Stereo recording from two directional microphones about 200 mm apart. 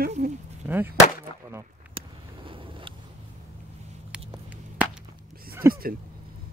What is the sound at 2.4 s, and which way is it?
Vehicle, 25° right (ahead or behind).